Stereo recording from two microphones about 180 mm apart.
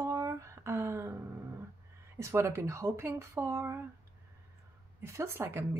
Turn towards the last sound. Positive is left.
turn(degrees=-15)  # may be behind; listen again after turning